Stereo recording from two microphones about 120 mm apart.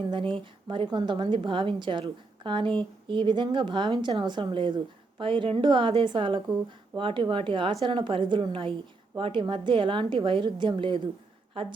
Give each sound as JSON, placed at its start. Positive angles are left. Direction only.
{"t": 0.1, "sound": "a woman's voice", "side_deg": -45}